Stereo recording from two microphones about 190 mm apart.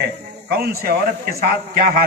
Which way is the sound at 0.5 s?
55° right (ahead or behind).